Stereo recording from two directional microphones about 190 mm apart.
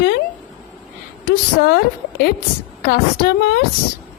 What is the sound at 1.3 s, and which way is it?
Speech, 55° left (ahead or behind).